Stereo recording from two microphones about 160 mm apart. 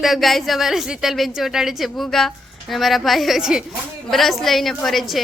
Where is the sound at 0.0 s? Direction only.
Centre (ahead or behind).